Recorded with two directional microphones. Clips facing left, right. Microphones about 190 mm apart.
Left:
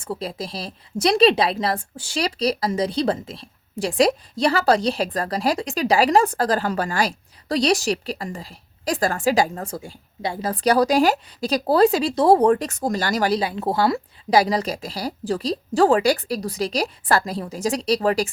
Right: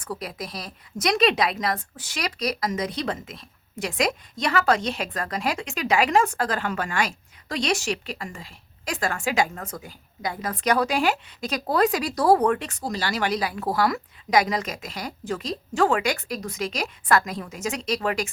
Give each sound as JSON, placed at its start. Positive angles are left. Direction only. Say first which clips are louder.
{"t": 0.0, "sound": "a woman's voice", "louder": "left 4 dB", "side_deg": 25}